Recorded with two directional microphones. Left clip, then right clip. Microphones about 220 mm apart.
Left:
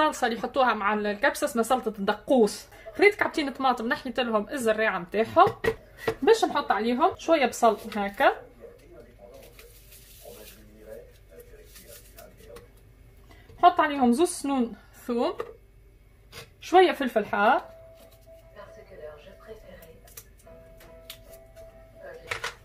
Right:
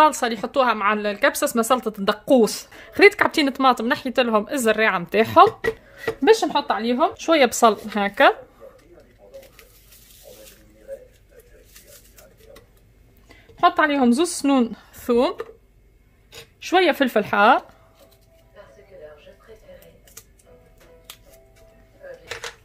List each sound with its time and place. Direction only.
0.0 s speech: 30° right (ahead or behind)
2.8 s speech: 50° right (ahead or behind)
5.6 s speech: 10° right (ahead or behind)
6.9 s speech: 55° right (ahead or behind)
13.6 s a woman's voice: 60° right (ahead or behind); by 15.3 s 40° right (ahead or behind)
16.6 s speech: 60° right (ahead or behind)